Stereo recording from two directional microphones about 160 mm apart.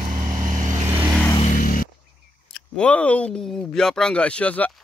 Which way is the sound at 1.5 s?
60° left (ahead or behind).